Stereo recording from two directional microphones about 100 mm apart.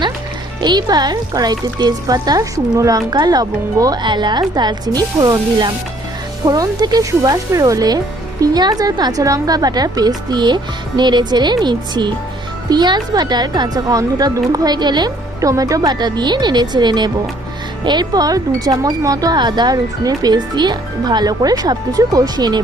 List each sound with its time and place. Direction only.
0.6 s speech: 45° right (ahead or behind)
7.1 s speech: 30° right (ahead or behind)